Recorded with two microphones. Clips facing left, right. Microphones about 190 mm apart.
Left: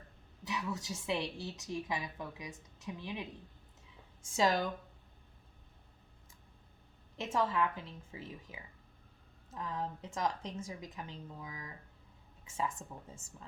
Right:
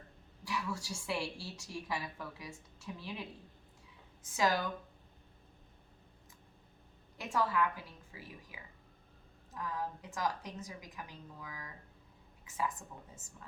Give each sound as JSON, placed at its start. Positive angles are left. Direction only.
{"t": 0.4, "sound": "a woman's voice", "side_deg": 20}
{"t": 7.2, "sound": "a woman's voice", "side_deg": 25}